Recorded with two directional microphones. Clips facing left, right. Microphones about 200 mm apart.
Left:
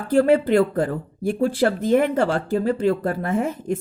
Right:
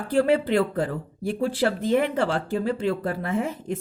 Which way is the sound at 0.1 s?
45° left (ahead or behind).